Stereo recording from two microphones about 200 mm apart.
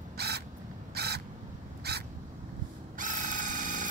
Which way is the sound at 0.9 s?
55° right (ahead or behind).